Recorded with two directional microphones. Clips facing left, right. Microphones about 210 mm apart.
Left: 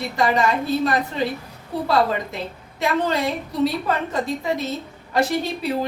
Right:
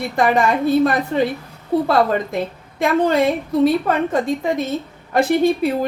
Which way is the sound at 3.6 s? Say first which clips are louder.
Right 5 dB; 50° right (ahead or behind).